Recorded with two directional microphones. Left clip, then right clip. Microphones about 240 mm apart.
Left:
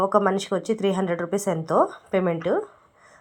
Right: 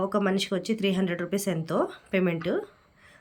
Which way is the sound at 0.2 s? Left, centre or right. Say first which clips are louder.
Left 5 dB; centre.